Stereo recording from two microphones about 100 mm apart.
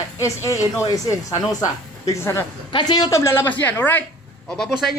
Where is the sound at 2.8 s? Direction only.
40° left (ahead or behind); by 4.0 s 20° left (ahead or behind).